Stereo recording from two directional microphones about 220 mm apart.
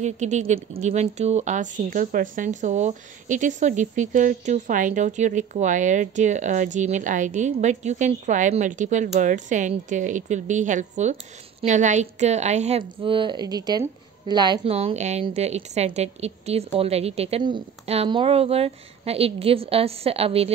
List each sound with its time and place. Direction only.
0.0 s speech: 30° right (ahead or behind)